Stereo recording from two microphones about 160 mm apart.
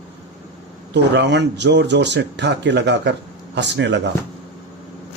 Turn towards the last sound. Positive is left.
turn(degrees=-90)